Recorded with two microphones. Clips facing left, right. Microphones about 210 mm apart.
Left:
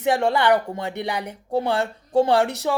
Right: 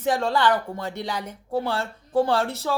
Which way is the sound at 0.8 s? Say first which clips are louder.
Left 3 dB; 65° left (ahead or behind).